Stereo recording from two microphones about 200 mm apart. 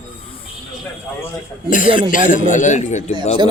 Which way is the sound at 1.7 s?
40° left (ahead or behind).